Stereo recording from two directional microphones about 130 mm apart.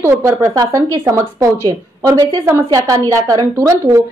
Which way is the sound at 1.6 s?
30° right (ahead or behind).